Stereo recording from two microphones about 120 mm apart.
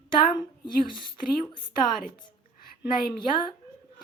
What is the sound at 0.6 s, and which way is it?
Speech, 45° left (ahead or behind).